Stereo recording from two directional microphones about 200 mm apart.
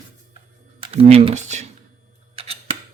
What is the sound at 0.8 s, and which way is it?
Speech, 30° right (ahead or behind).